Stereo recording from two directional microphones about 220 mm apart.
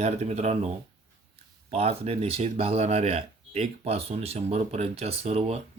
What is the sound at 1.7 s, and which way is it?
Speech, 25° right (ahead or behind).